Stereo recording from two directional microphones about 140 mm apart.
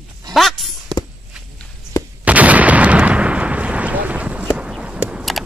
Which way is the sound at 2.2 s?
10° right (ahead or behind).